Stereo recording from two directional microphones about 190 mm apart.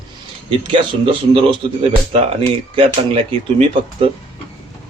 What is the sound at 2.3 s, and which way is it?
Speech, 30° right (ahead or behind).